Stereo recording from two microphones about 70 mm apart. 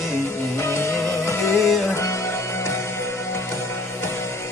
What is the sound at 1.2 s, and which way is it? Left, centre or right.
Music, left.